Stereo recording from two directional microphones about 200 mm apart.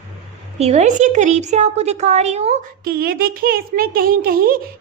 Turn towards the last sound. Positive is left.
turn(degrees=-45)  # may be behind; listen again after turning